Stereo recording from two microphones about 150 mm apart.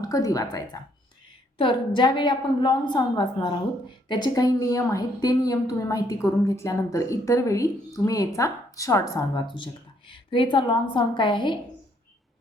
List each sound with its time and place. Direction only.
0.0 s a woman's voice: 25° left (ahead or behind)